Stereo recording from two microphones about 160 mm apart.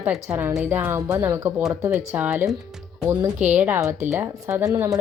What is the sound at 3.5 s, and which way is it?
A woman's voice, 10° right (ahead or behind).